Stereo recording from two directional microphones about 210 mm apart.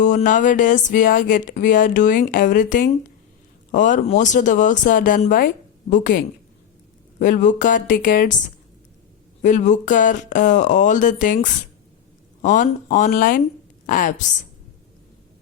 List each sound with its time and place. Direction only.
0.0 s speech: 35° left (ahead or behind)
9.4 s a woman's voice: 35° left (ahead or behind)